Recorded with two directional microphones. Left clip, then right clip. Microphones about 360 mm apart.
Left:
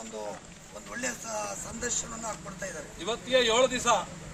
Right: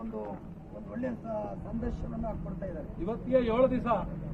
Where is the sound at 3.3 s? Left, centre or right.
Centre.